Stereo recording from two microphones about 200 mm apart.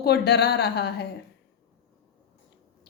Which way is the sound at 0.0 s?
55° left (ahead or behind).